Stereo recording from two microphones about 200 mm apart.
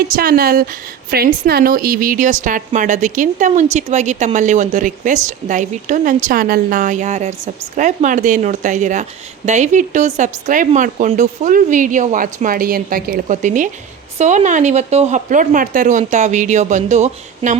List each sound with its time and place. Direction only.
0.2 s a woman's voice: 50° right (ahead or behind)